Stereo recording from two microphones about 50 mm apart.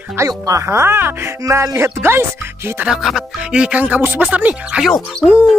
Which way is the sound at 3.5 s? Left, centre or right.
Centre.